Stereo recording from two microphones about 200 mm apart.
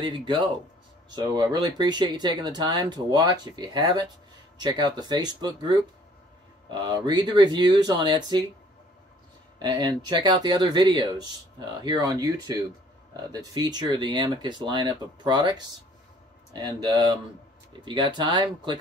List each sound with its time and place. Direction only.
0.0 s speech: 25° right (ahead or behind)
9.6 s speech: 20° right (ahead or behind)